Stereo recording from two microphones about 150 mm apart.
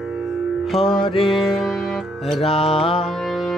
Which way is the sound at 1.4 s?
Centre (ahead or behind).